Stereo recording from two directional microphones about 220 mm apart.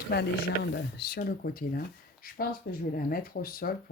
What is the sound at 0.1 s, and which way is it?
Speech, 50° left (ahead or behind).